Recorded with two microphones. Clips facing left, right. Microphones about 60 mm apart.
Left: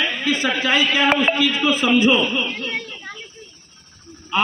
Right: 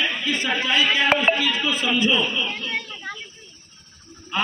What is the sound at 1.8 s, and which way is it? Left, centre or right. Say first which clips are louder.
Speech: left 7 dB; left.